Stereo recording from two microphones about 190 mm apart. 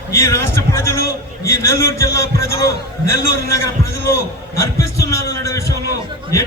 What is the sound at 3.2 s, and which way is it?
Speech, 15° left (ahead or behind).